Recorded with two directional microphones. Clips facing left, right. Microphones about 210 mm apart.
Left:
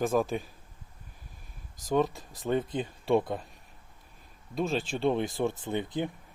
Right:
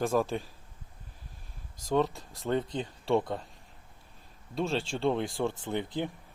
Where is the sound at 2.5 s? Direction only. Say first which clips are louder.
Left 1 dB; 5° left (ahead or behind).